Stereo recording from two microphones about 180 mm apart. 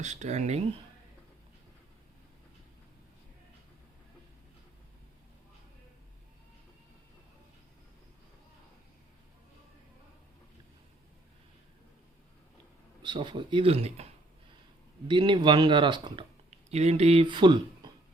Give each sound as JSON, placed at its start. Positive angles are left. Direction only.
{"t": 0.0, "sound": "speech", "side_deg": -40}
{"t": 13.0, "sound": "speech", "side_deg": -25}